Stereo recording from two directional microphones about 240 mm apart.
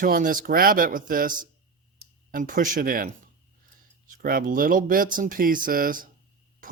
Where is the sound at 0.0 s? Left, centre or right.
Right.